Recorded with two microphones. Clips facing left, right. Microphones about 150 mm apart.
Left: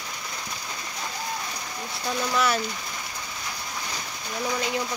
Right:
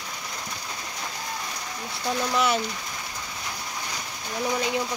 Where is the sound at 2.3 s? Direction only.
20° right (ahead or behind).